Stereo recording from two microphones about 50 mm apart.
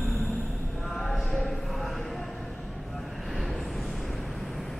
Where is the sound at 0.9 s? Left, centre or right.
Centre.